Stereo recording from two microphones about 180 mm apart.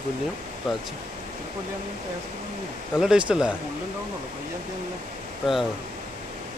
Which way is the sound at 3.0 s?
5° right (ahead or behind).